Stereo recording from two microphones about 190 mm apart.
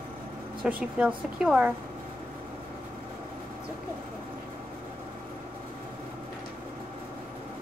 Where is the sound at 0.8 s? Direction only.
5° right (ahead or behind).